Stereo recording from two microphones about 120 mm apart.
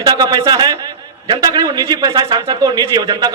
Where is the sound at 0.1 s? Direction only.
35° right (ahead or behind).